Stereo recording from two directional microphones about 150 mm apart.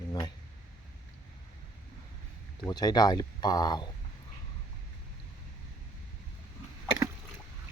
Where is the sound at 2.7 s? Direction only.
25° left (ahead or behind).